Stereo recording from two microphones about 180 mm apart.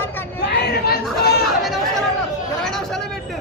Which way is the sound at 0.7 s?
60° left (ahead or behind).